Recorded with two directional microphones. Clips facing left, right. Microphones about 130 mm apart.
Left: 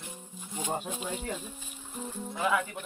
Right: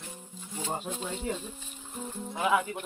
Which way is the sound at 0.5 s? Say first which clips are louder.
Left 1 dB; 15° left (ahead or behind).